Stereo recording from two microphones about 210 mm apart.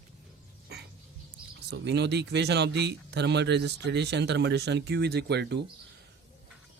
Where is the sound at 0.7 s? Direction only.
50° right (ahead or behind).